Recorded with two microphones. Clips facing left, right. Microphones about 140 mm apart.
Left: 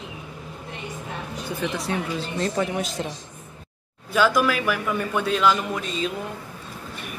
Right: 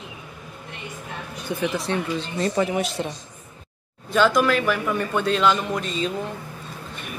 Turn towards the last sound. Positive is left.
turn(degrees=5)  # may be behind; listen again after turning